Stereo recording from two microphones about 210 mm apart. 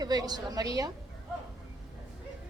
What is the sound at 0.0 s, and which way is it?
Speech, 20° right (ahead or behind).